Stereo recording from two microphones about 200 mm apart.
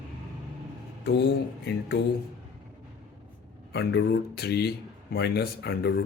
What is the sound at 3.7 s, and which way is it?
Speech, 60° left (ahead or behind).